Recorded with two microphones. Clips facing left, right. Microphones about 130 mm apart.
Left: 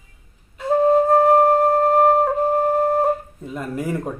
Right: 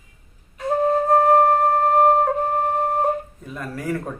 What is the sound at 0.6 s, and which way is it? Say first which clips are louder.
Flute: left 4 dB; 30° left (ahead or behind).